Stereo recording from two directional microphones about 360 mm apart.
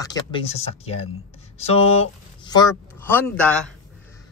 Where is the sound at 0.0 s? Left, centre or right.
Centre.